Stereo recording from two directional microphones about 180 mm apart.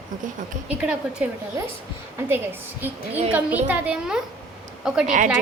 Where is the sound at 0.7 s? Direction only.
5° right (ahead or behind).